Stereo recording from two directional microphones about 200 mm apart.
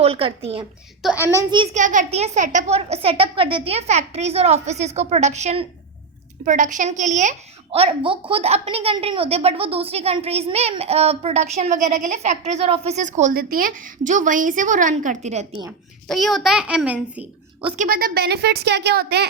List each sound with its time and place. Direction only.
0.0 s a woman's voice: 30° right (ahead or behind)
1.0 s a child's voice: centre (ahead or behind)
1.4 s a woman's voice: 20° right (ahead or behind)
1.7 s a woman's voice: 40° right (ahead or behind)
16.0 s a child's voice: centre (ahead or behind)
17.7 s a woman's voice: 45° right (ahead or behind)